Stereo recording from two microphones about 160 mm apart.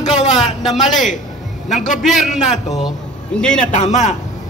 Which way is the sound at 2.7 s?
Centre (ahead or behind).